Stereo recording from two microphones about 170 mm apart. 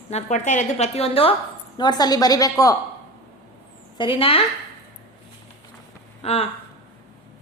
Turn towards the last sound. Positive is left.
turn(degrees=35)  # may be behind; listen again after turning